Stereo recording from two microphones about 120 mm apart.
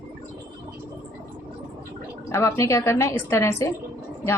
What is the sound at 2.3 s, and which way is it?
A woman's voice, 25° left (ahead or behind).